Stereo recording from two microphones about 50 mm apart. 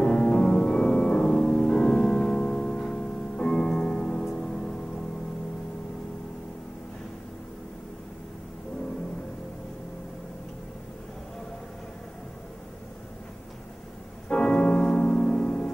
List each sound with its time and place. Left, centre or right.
0.0 s music: centre
14.3 s music: centre